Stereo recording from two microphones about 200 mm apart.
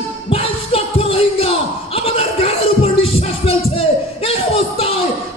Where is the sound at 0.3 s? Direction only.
30° left (ahead or behind).